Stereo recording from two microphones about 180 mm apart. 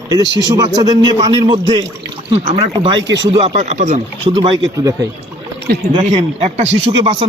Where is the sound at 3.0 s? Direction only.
80° right.